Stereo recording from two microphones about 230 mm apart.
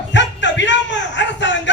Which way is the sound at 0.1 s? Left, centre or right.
Left.